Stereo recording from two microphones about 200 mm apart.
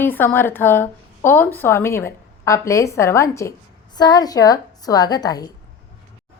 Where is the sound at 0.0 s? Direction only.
10° left (ahead or behind).